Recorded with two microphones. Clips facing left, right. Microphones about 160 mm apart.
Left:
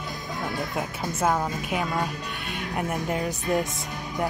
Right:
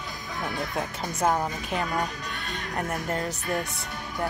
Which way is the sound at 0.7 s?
5° left (ahead or behind).